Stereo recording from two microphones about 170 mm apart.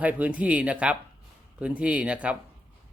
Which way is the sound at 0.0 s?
10° right (ahead or behind).